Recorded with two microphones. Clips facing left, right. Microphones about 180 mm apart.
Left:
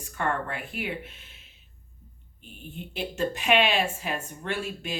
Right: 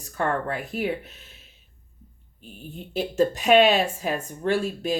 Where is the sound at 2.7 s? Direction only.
40° right (ahead or behind).